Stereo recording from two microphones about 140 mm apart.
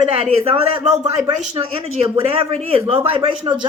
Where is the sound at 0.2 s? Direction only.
40° right (ahead or behind).